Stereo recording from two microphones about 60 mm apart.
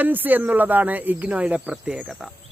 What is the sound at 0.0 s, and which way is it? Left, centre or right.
Speech, right.